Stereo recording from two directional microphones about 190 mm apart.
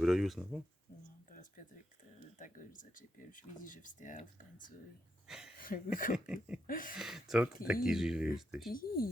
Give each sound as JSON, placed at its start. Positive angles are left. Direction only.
{"t": 0.0, "sound": "speech", "side_deg": 0}
{"t": 1.3, "sound": "a sound", "side_deg": 45}
{"t": 2.4, "sound": "speech", "side_deg": 45}
{"t": 5.3, "sound": "speech", "side_deg": -5}
{"t": 5.5, "sound": "a sound", "side_deg": 45}
{"t": 6.1, "sound": "speech", "side_deg": -5}
{"t": 6.7, "sound": "speech", "side_deg": 45}
{"t": 6.9, "sound": "speech", "side_deg": 0}
{"t": 8.7, "sound": "speech", "side_deg": 50}